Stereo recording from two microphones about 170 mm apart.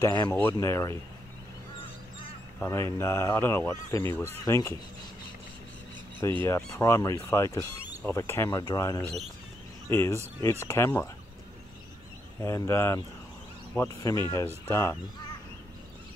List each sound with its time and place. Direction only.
0.0 s speech: 15° left (ahead or behind)
2.6 s speech: 15° left (ahead or behind)
6.2 s speech: 15° left (ahead or behind)
12.4 s speech: 15° left (ahead or behind)